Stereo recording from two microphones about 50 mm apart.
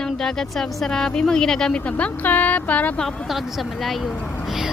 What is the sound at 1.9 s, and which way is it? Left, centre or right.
Speech, left.